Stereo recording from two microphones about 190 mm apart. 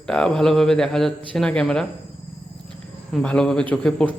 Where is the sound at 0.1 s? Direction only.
5° left (ahead or behind).